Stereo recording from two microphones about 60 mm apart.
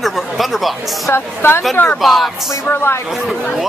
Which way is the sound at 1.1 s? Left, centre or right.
Left.